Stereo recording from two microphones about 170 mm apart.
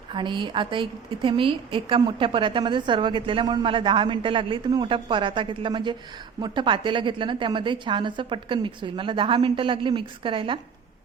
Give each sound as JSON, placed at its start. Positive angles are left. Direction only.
{"t": 0.1, "sound": "a woman's voice", "side_deg": -30}